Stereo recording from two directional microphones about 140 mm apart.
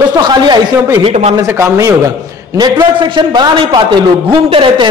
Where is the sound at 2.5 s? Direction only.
30° right (ahead or behind).